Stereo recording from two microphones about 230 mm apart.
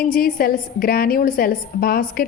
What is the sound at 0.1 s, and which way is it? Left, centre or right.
A woman's voice, left.